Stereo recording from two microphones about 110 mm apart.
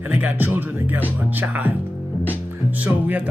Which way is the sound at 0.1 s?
20° right (ahead or behind).